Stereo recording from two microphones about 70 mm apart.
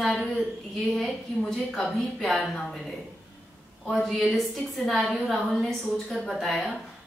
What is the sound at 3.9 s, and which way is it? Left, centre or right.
A woman's voice, centre.